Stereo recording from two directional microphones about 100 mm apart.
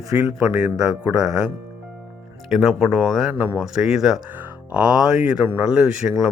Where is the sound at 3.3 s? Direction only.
15° right (ahead or behind).